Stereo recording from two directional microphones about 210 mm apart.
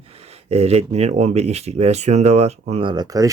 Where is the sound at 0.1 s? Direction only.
30° right (ahead or behind).